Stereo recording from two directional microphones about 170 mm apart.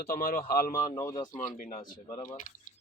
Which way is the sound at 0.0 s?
65° left (ahead or behind).